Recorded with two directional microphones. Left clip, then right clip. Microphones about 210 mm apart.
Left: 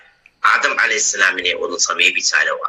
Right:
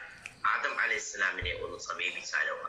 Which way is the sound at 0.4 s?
50° left (ahead or behind).